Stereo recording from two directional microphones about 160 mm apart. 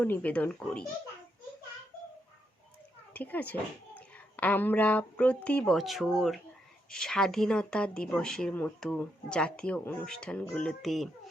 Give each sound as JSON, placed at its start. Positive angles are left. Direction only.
{"t": 0.0, "sound": "speech", "side_deg": 10}
{"t": 3.1, "sound": "a woman's voice", "side_deg": 10}